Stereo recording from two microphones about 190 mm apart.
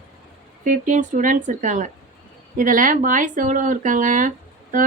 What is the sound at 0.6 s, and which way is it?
A woman's voice, 45° right (ahead or behind).